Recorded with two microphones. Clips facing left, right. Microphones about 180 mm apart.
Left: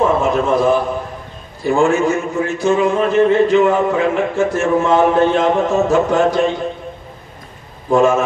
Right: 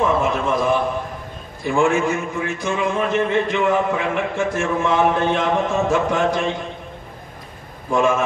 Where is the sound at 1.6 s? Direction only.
40° left (ahead or behind).